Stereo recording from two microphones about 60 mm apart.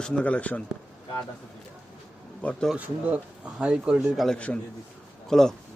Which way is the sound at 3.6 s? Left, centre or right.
Centre.